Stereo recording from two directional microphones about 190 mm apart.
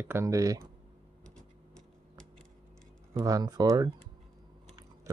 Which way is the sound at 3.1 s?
20° right (ahead or behind).